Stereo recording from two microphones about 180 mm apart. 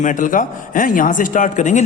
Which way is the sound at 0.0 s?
45° left (ahead or behind).